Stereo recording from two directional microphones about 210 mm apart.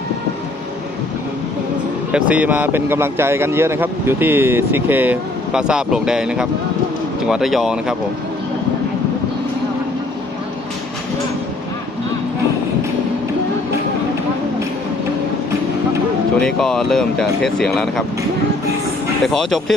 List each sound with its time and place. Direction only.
2.1 s speech: 5° right (ahead or behind)
16.4 s speech: centre (ahead or behind)
19.2 s speech: centre (ahead or behind)